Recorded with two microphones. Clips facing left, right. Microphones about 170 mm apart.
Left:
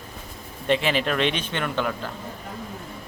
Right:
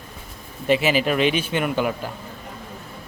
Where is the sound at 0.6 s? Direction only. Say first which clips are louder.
Right 3 dB; 5° right (ahead or behind).